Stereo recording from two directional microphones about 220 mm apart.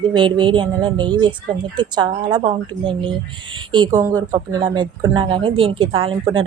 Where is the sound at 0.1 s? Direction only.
20° right (ahead or behind).